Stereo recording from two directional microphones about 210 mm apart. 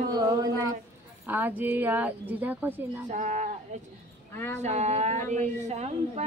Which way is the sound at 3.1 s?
35° right (ahead or behind).